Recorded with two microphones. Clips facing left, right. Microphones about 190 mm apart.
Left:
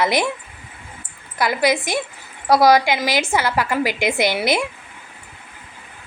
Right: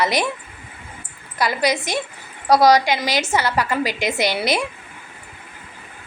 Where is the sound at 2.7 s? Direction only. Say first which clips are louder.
Left 1 dB; 10° left (ahead or behind).